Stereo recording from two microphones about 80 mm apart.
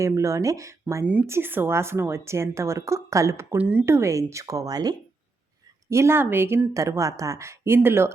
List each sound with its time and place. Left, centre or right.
0.0 s a woman's voice: right
1.3 s a woman's voice: right
3.6 s speech: centre
3.8 s a woman's voice: right
5.9 s a woman's voice: right
6.7 s a woman's voice: right